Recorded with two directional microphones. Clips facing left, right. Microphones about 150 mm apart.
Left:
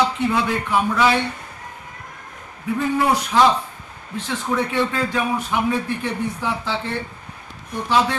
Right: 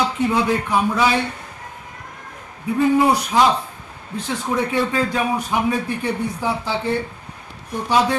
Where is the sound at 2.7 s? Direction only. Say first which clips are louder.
Right 4 dB; 15° right (ahead or behind).